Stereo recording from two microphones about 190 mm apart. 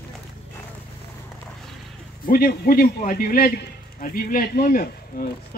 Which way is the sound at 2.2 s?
50° left (ahead or behind).